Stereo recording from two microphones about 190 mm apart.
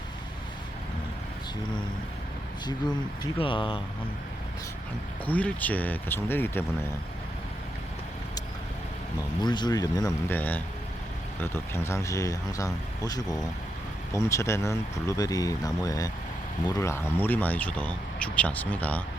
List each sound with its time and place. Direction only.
3.3 s speech: 25° left (ahead or behind)
5.2 s speech: 10° left (ahead or behind)
9.4 s speech: 25° left (ahead or behind)